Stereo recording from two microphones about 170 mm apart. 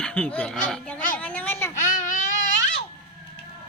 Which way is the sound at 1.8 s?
50° left (ahead or behind).